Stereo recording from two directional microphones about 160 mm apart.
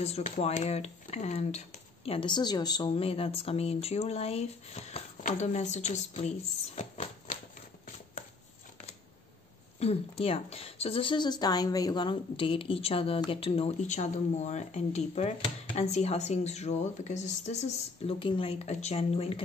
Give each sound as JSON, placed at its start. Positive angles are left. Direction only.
{"t": 0.0, "sound": "speech", "side_deg": 40}
{"t": 2.0, "sound": "a woman's voice", "side_deg": 30}
{"t": 2.9, "sound": "speech", "side_deg": 35}
{"t": 9.8, "sound": "speech", "side_deg": 40}